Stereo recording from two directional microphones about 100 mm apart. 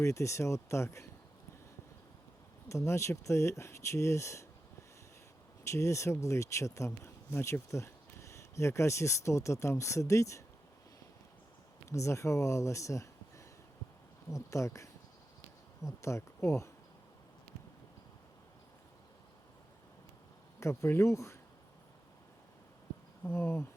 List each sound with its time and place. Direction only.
0.0 s speech: 30° left (ahead or behind)
2.6 s speech: 30° left (ahead or behind)
5.6 s speech: 30° left (ahead or behind)
11.9 s speech: 30° left (ahead or behind)
20.6 s speech: 25° left (ahead or behind)
23.2 s speech: 25° left (ahead or behind)